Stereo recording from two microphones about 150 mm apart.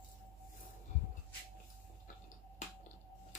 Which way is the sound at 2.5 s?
50° left (ahead or behind).